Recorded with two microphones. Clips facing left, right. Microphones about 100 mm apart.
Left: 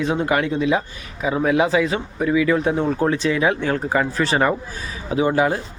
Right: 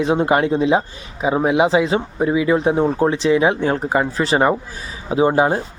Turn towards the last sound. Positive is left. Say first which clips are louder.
# right 3 dB
turn(degrees=-30)  # may be behind; listen again after turning